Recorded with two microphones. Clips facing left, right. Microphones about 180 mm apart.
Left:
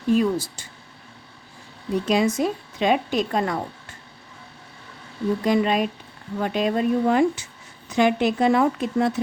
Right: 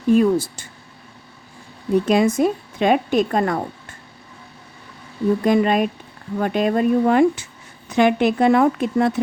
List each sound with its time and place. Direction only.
0.1 s a woman's voice: 55° right (ahead or behind)
2.0 s a woman's voice: 50° right (ahead or behind)
5.4 s a woman's voice: 50° right (ahead or behind)